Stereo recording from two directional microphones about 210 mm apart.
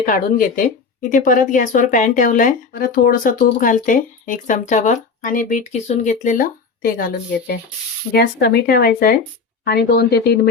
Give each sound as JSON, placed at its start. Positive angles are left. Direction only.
{"t": 0.0, "sound": "speech", "side_deg": 40}